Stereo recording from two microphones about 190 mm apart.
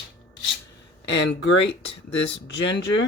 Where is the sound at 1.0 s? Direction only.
75° left (ahead or behind).